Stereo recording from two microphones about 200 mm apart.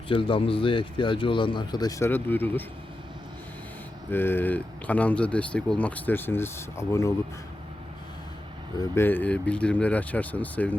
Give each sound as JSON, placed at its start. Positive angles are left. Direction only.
{"t": 0.1, "sound": "speech", "side_deg": 25}
{"t": 4.1, "sound": "speech", "side_deg": 10}
{"t": 8.8, "sound": "speech", "side_deg": 10}